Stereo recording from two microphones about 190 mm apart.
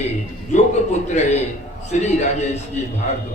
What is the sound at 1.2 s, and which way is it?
Speech, 35° left (ahead or behind).